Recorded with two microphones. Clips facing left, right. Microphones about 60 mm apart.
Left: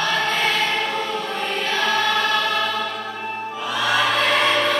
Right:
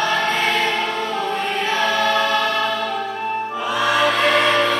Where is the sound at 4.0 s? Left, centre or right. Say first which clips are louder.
Right 3 dB; centre.